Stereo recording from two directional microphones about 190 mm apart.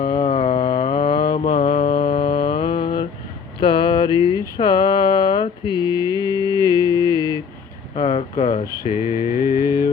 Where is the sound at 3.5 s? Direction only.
25° left (ahead or behind).